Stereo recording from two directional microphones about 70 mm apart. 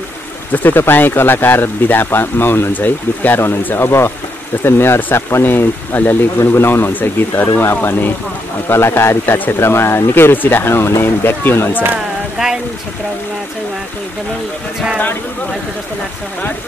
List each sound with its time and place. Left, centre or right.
0.5 s speech: left